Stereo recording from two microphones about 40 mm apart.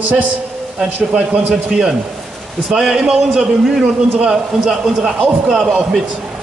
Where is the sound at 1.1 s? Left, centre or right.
Right.